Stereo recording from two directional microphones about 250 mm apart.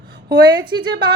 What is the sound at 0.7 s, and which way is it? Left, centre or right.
Speech, right.